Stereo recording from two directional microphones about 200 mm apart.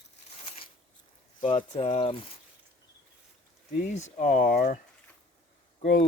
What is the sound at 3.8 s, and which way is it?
Speech, 35° left (ahead or behind).